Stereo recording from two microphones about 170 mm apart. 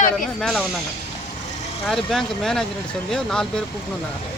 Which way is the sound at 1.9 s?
Centre (ahead or behind).